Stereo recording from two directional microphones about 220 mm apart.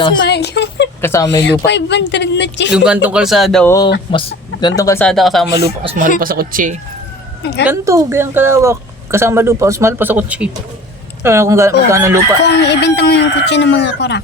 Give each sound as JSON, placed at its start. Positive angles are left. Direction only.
{"t": 0.3, "sound": "a sound", "side_deg": 50}
{"t": 1.0, "sound": "speech", "side_deg": 15}
{"t": 1.4, "sound": "speech", "side_deg": 50}
{"t": 2.7, "sound": "a man's voice", "side_deg": -5}
{"t": 4.1, "sound": "speech", "side_deg": 20}
{"t": 5.0, "sound": "a man's voice", "side_deg": 0}
{"t": 5.8, "sound": "speech", "side_deg": -25}
{"t": 6.1, "sound": "speech", "side_deg": -40}
{"t": 7.4, "sound": "speech", "side_deg": 50}
{"t": 7.7, "sound": "a woman's voice", "side_deg": -15}
{"t": 12.4, "sound": "speech", "side_deg": 50}